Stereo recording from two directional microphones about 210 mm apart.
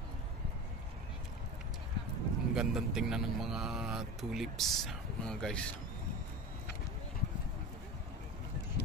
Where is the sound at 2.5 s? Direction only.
Centre (ahead or behind).